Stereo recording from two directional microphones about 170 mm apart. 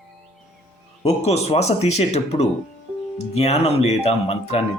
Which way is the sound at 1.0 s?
40° left (ahead or behind).